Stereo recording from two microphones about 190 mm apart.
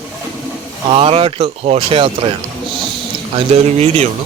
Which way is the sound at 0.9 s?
30° right (ahead or behind).